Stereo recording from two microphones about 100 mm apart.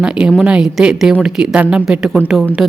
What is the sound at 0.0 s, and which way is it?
A woman's voice, 10° right (ahead or behind).